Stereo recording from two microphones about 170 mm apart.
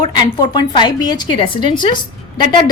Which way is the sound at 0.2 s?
25° left (ahead or behind).